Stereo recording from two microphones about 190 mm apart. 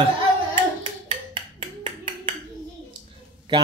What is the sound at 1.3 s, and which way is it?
Finger snapping, 30° right (ahead or behind).